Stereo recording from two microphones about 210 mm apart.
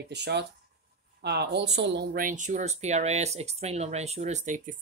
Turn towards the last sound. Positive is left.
turn(degrees=-35)  # may be behind; listen again after turning